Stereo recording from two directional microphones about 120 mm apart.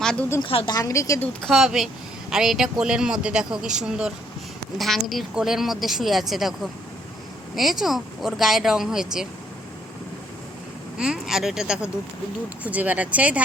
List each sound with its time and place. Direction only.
0.0 s a woman's voice: 5° left (ahead or behind)
0.4 s speech: 50° left (ahead or behind)
0.7 s a woman's voice: 30° left (ahead or behind)
1.4 s speech: centre (ahead or behind)
10.9 s speech: 5° right (ahead or behind)